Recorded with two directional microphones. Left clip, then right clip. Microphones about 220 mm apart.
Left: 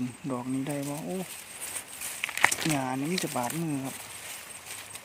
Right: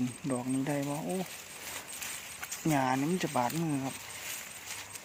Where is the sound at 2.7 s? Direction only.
Centre (ahead or behind).